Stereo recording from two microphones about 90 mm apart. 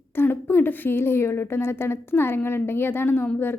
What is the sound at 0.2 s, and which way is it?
A woman's voice, 25° left (ahead or behind).